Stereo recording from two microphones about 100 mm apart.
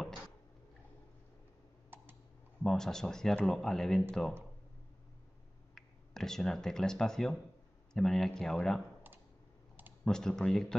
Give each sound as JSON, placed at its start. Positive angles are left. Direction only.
{"t": 1.9, "sound": "computer keyboard", "side_deg": -20}
{"t": 2.6, "sound": "speech", "side_deg": 5}
{"t": 5.8, "sound": "speech", "side_deg": 5}
{"t": 10.0, "sound": "speech", "side_deg": 5}